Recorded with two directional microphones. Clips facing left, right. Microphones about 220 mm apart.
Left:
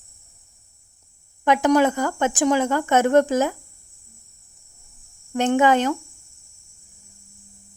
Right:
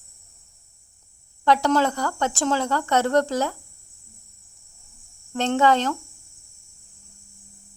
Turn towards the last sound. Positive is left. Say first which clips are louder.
# left 2 dB
turn(degrees=15)  # may be behind; listen again after turning